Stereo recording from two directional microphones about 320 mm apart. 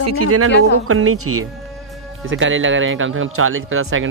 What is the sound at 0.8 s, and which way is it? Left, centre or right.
Speech, right.